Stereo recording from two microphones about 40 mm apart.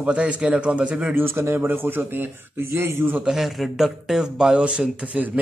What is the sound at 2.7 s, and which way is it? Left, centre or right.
Speech, right.